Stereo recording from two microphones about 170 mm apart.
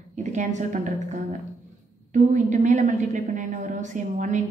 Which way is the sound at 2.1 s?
45° right (ahead or behind).